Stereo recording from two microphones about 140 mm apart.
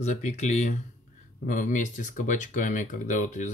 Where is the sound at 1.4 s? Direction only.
65° left (ahead or behind).